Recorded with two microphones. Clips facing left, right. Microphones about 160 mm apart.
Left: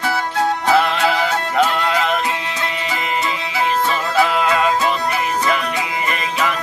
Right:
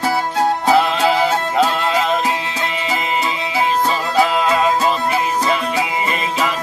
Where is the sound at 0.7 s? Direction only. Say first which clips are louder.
Right 1 dB; 15° right (ahead or behind).